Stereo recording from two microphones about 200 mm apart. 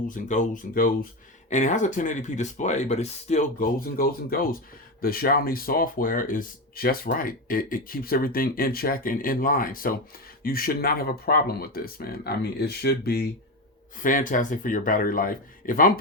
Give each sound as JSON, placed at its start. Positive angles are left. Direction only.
{"t": 0.1, "sound": "speech", "side_deg": 40}